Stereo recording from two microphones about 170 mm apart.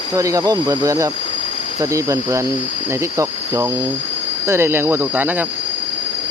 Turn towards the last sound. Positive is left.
turn(degrees=-10)  # may be behind; listen again after turning